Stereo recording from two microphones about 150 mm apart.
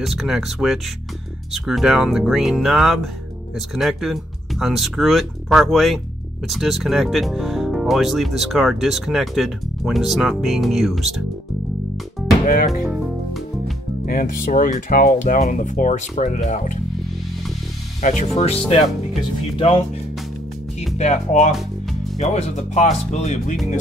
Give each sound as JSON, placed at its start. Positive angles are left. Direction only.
{"t": 0.0, "sound": "speech", "side_deg": 0}
{"t": 12.4, "sound": "speech", "side_deg": 70}
{"t": 12.8, "sound": "music", "side_deg": 0}
{"t": 14.0, "sound": "speech", "side_deg": 70}
{"t": 18.0, "sound": "speech", "side_deg": 50}
{"t": 21.0, "sound": "speech", "side_deg": 50}
{"t": 21.5, "sound": "music", "side_deg": 0}
{"t": 22.2, "sound": "speech", "side_deg": 45}